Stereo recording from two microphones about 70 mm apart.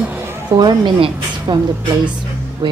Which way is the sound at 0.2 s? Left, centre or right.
Right.